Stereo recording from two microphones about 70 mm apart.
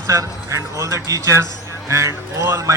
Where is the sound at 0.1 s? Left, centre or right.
Right.